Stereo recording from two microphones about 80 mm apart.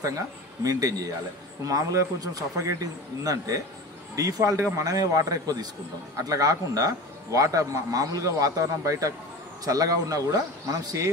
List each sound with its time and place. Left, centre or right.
0.7 s speech: right